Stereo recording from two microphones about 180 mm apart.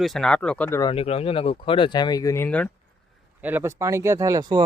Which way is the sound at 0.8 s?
30° left (ahead or behind).